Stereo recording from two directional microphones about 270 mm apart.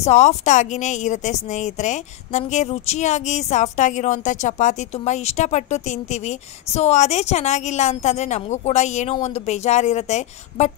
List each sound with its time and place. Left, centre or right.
0.0 s speech: left